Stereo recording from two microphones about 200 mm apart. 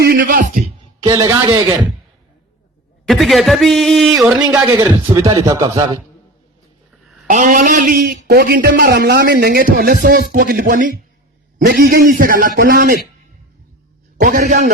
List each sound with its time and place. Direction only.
0.0 s a sound: 45° right (ahead or behind)
1.0 s speech: 20° right (ahead or behind)
3.1 s speech: centre (ahead or behind)
5.1 s speech: 20° right (ahead or behind)
7.3 s a man's voice: 40° right (ahead or behind)
14.2 s a man's voice: 45° right (ahead or behind)